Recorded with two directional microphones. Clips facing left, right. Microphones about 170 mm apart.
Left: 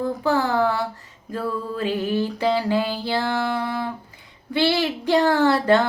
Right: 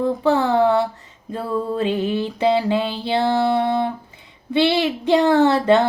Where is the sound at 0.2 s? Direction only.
25° right (ahead or behind).